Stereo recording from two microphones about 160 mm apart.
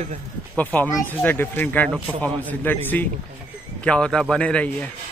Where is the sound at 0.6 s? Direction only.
10° left (ahead or behind).